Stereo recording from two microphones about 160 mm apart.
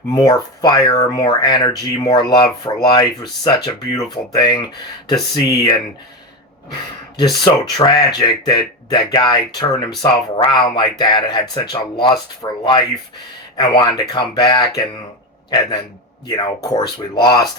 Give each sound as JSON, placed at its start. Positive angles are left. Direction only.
{"t": 0.1, "sound": "speech", "side_deg": 25}
{"t": 7.2, "sound": "a man's voice", "side_deg": 25}